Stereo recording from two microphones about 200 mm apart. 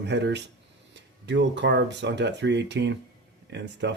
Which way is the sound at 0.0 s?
60° right (ahead or behind).